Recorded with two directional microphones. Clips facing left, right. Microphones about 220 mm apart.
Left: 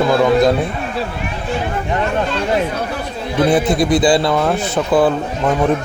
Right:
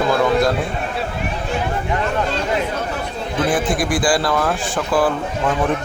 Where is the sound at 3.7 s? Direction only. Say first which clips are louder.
Left 5 dB; 25° left (ahead or behind).